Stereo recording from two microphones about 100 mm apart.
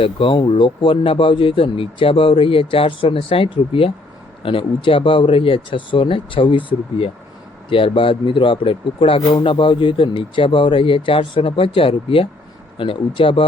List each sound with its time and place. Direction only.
0.0 s speech: 60° left (ahead or behind)